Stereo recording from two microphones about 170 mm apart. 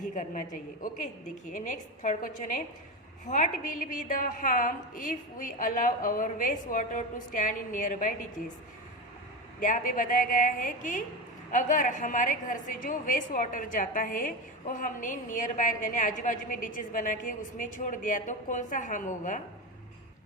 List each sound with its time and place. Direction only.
0.0 s a woman's voice: 45° left (ahead or behind)
9.6 s a woman's voice: 50° left (ahead or behind)